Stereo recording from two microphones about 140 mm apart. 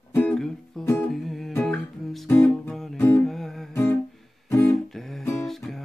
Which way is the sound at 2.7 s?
Centre (ahead or behind).